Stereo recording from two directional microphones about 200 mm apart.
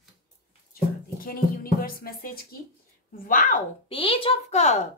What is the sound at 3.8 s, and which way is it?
A woman's voice, 25° left (ahead or behind).